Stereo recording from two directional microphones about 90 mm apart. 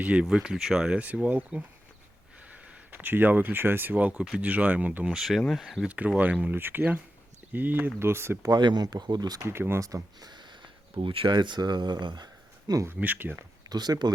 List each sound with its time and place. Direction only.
0.0 s speech: 15° right (ahead or behind)
2.6 s speech: 15° right (ahead or behind)
5.9 s speech: 15° right (ahead or behind)
8.4 s speech: 50° right (ahead or behind)
9.4 s speech: 25° right (ahead or behind)
9.8 s speech: 45° right (ahead or behind)
12.8 s speech: 20° right (ahead or behind)
13.7 s speech: 50° right (ahead or behind)